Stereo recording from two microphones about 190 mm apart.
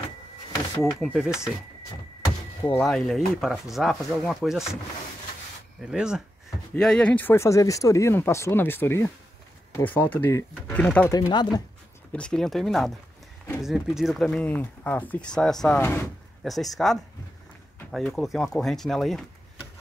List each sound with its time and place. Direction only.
0.9 s speech: centre (ahead or behind)
2.6 s speech: 5° left (ahead or behind)
5.8 s speech: 5° right (ahead or behind)
11.1 s speech: 20° left (ahead or behind)
12.1 s speech: 5° left (ahead or behind)
16.4 s speech: centre (ahead or behind)